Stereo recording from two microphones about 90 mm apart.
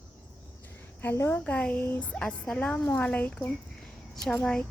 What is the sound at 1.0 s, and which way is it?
Speech, 25° left (ahead or behind).